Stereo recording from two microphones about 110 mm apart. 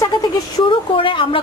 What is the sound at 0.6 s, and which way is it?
Speech, 50° left (ahead or behind).